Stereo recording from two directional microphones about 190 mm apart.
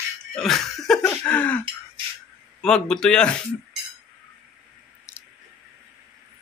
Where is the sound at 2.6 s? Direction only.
5° left (ahead or behind).